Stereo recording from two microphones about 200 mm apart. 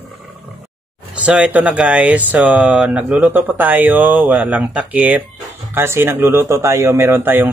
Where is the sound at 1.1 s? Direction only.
5° right (ahead or behind).